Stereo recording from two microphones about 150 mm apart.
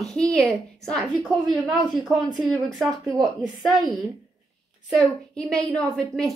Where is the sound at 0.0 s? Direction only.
Centre (ahead or behind).